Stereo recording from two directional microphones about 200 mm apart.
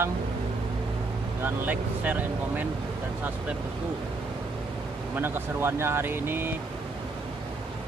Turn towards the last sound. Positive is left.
turn(degrees=-10)  # may be behind; listen again after turning